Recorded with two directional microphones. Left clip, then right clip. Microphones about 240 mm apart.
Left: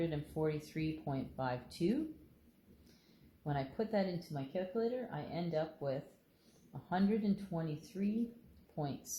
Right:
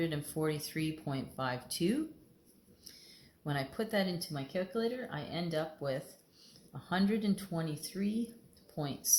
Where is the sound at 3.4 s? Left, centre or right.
Right.